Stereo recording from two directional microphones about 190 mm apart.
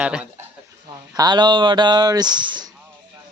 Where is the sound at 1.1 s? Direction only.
20° right (ahead or behind).